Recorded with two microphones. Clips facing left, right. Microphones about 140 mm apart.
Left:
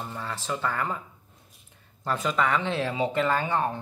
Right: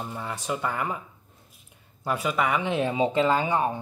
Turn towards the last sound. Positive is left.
turn(degrees=-15)  # may be behind; listen again after turning